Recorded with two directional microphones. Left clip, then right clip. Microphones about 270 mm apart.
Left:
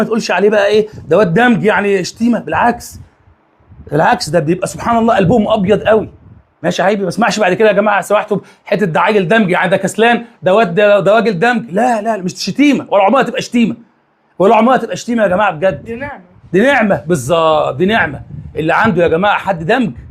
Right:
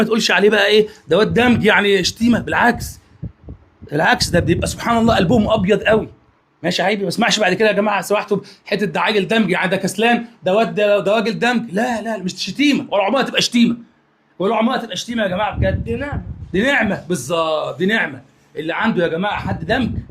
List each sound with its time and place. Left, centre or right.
0.0 s a man's voice: centre
1.5 s a man's voice: centre
3.8 s a man's voice: centre
11.9 s speech: left
13.3 s speech: centre
14.3 s speech: left
14.8 s speech: left
15.9 s speech: centre
16.5 s speech: left